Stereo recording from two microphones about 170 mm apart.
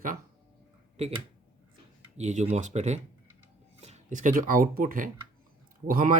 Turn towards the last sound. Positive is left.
turn(degrees=-55)  # may be behind; listen again after turning